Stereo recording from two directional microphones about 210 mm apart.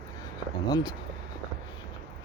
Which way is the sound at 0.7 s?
20° left (ahead or behind).